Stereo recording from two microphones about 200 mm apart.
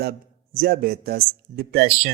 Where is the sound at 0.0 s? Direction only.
50° right (ahead or behind).